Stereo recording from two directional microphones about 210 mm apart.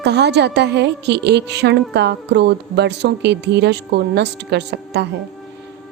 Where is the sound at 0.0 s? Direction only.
55° right (ahead or behind).